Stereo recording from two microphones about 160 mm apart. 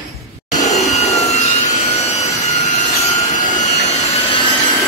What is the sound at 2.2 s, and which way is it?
Jet engine, 45° left (ahead or behind).